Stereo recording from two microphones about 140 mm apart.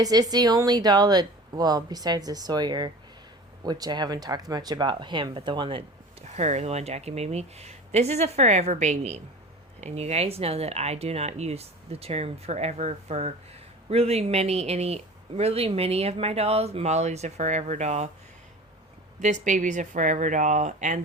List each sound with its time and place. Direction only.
0.0 s speech: 30° right (ahead or behind)
6.2 s speech: 55° right (ahead or behind)
19.2 s speech: 60° right (ahead or behind)